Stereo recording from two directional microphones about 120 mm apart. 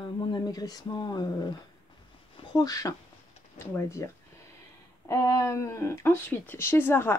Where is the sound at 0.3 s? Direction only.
35° left (ahead or behind).